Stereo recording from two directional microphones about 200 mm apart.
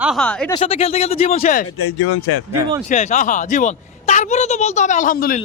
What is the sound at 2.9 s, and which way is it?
A woman's voice, 35° left (ahead or behind).